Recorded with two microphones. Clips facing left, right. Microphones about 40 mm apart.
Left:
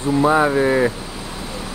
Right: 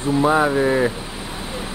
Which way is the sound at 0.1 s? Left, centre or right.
Centre.